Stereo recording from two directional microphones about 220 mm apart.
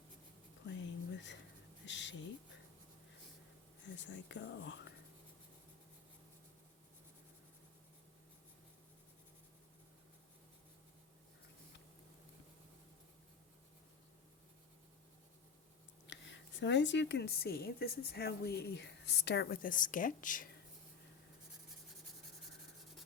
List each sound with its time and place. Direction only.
0.7 s a sound: 55° left (ahead or behind)
3.8 s speech: 55° left (ahead or behind)
16.0 s a woman's voice: 55° left (ahead or behind); by 20.5 s 35° left (ahead or behind)